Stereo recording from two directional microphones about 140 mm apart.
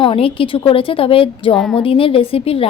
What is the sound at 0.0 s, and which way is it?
A woman's voice, 40° left (ahead or behind).